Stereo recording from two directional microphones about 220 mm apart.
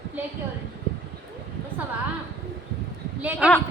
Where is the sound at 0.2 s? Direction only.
10° right (ahead or behind).